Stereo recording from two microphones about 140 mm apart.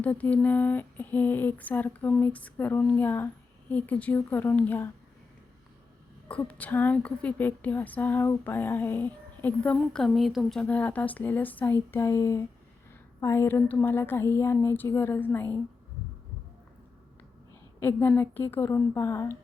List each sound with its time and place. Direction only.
0.0 s a woman's voice: 10° left (ahead or behind)
6.2 s a woman's voice: 10° left (ahead or behind)
17.7 s a woman's voice: 15° left (ahead or behind)